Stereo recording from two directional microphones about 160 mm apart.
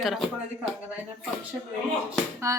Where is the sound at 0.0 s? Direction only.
Centre (ahead or behind).